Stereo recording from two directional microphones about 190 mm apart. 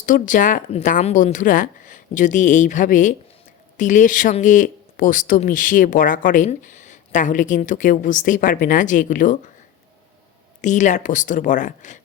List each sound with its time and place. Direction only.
0.0 s speech: 45° left (ahead or behind)
10.6 s speech: 40° left (ahead or behind)